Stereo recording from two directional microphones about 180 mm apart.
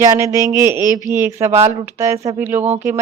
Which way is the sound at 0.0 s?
20° right (ahead or behind).